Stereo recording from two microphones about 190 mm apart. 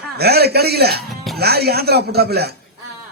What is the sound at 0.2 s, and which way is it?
Speech, 55° right (ahead or behind).